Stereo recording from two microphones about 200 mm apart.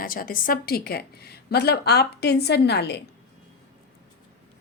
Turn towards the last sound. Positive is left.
turn(degrees=55)  # may be behind; listen again after turning